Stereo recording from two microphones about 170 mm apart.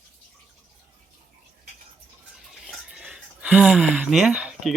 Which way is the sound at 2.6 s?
Centre (ahead or behind).